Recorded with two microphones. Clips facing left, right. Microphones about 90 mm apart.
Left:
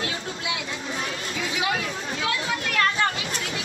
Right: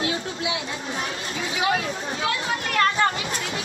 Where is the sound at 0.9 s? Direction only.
35° right (ahead or behind).